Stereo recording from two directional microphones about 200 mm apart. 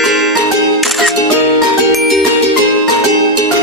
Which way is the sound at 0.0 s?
Centre (ahead or behind).